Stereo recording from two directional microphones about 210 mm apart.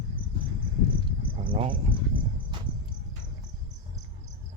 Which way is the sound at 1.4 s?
25° right (ahead or behind).